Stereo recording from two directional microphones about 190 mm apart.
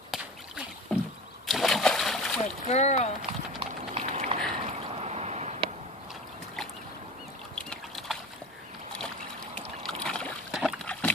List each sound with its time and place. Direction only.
0.1 s rowboat: centre (ahead or behind)
1.5 s splash: centre (ahead or behind)
2.7 s speech: 35° left (ahead or behind)
3.5 s clip-clop: 35° right (ahead or behind)
4.6 s a sound: 35° right (ahead or behind)
7.5 s a sound: centre (ahead or behind)
9.6 s boat: 5° left (ahead or behind)